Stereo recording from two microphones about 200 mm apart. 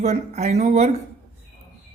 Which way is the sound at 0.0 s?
35° right (ahead or behind).